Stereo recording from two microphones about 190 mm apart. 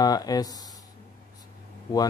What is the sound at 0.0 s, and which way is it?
Speech, 20° left (ahead or behind).